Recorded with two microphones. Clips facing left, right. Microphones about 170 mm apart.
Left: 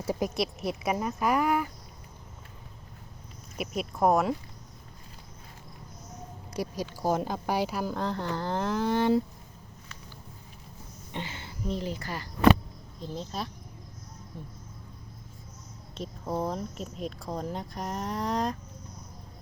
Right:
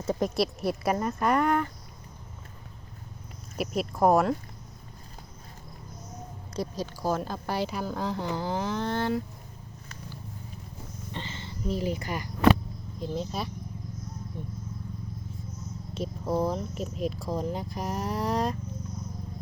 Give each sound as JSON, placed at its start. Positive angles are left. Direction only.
{"t": 0.0, "sound": "speech", "side_deg": 5}
{"t": 3.6, "sound": "speech", "side_deg": 0}
{"t": 6.5, "sound": "speech", "side_deg": 15}
{"t": 8.9, "sound": "speech", "side_deg": 15}
{"t": 11.1, "sound": "speech", "side_deg": 10}
{"t": 11.7, "sound": "speech", "side_deg": -10}
{"t": 13.0, "sound": "speech", "side_deg": -5}
{"t": 16.0, "sound": "speech", "side_deg": -5}